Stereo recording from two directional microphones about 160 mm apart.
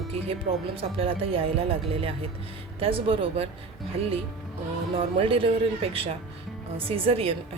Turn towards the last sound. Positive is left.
turn(degrees=-35)  # may be behind; listen again after turning